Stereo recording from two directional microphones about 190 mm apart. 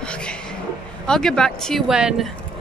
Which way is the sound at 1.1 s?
5° left (ahead or behind).